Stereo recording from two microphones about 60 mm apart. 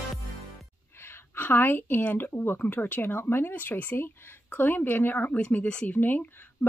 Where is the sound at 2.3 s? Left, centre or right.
Left.